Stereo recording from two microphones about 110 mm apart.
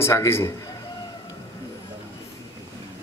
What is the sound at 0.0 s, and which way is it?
Speech, 25° left (ahead or behind).